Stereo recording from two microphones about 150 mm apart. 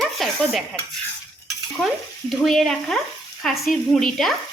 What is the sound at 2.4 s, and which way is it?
A woman's voice, centre (ahead or behind).